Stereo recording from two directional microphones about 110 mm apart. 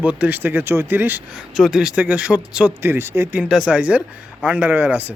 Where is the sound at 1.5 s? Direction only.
5° right (ahead or behind).